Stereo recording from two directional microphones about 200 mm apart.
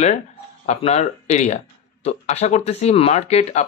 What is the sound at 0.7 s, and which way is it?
Speech, 35° left (ahead or behind).